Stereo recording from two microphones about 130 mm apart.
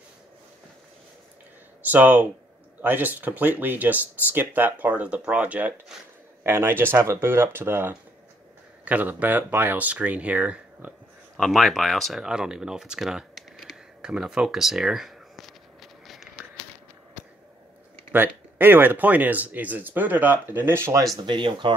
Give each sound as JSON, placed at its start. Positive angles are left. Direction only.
{"t": 1.8, "sound": "speech", "side_deg": -15}
{"t": 11.3, "sound": "speech", "side_deg": 0}
{"t": 18.1, "sound": "speech", "side_deg": -15}
{"t": 21.2, "sound": "speech", "side_deg": -35}